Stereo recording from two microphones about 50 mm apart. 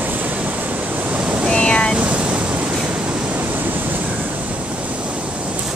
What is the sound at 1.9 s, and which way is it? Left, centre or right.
Waves, right.